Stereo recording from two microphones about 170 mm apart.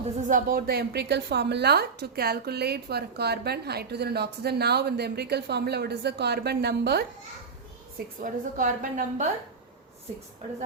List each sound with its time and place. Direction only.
0.2 s a woman's voice: 50° right (ahead or behind); by 7.0 s 70° right (ahead or behind)
7.9 s a woman's voice: 50° right (ahead or behind)